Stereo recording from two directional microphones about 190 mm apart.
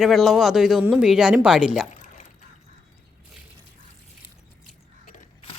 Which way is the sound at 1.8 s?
40° left (ahead or behind).